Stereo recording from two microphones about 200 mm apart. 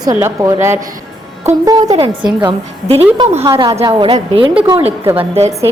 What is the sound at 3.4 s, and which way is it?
A woman's voice, 20° right (ahead or behind).